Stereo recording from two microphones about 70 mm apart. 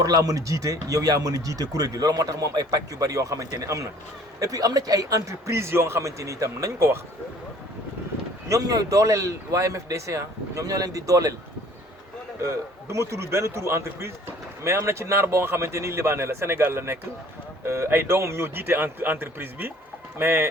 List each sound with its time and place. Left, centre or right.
0.0 s speech: right
8.4 s speech: right
12.4 s speech: right